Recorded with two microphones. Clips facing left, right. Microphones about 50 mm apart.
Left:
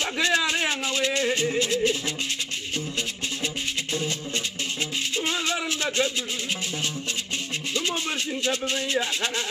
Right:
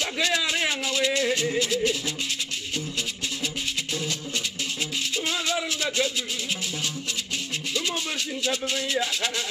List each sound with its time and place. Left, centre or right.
0.0 s a sound: left
0.8 s speech: left
5.1 s music: left
7.7 s music: left
8.5 s speech: left